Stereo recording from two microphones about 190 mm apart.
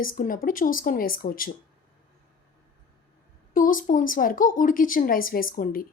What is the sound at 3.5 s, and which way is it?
A woman's voice, 45° left (ahead or behind).